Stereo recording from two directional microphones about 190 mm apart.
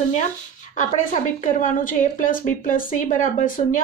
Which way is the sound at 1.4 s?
45° left (ahead or behind).